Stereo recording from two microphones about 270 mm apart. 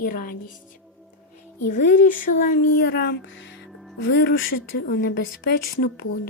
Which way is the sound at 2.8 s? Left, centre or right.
Left.